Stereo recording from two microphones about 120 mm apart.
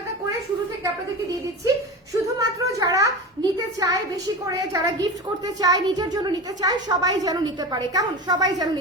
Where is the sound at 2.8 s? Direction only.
30° right (ahead or behind).